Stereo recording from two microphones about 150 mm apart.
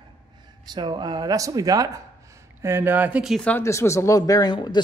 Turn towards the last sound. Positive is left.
turn(degrees=30)  # may be behind; listen again after turning